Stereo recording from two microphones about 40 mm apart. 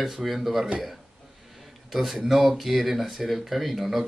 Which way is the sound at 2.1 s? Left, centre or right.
Centre.